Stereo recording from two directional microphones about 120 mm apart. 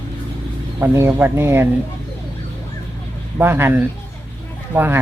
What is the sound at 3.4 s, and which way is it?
Speech, 20° right (ahead or behind).